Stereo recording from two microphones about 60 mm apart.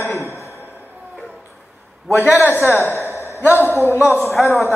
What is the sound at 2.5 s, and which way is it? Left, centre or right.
Speech, left.